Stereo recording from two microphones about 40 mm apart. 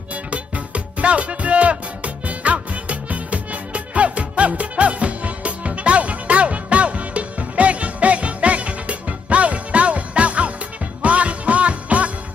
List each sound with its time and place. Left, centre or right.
0.1 s music: right